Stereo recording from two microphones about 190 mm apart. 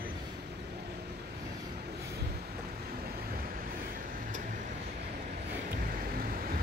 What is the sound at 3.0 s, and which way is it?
Vehicle, 50° right (ahead or behind).